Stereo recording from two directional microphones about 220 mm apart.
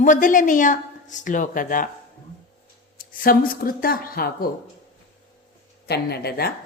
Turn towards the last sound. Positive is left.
turn(degrees=45)  # may be behind; listen again after turning